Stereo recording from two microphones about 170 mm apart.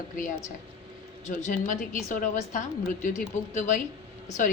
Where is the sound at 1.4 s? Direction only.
45° left (ahead or behind).